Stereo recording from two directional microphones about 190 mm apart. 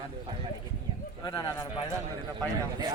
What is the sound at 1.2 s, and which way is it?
Speech, 20° left (ahead or behind).